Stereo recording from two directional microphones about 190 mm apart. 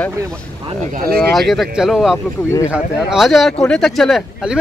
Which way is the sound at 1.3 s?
Centre (ahead or behind).